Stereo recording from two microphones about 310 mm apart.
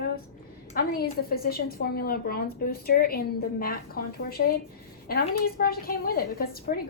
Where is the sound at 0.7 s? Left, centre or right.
Left.